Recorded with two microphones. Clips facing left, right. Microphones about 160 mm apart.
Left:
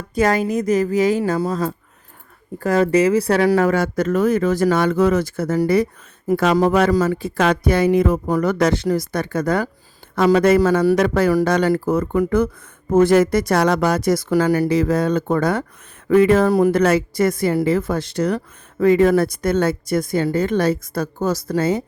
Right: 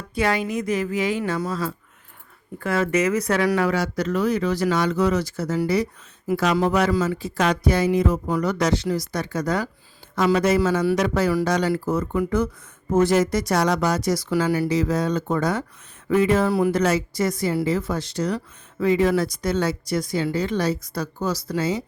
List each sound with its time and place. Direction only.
0.1 s speech: 45° left (ahead or behind)
3.7 s speech: 50° left (ahead or behind)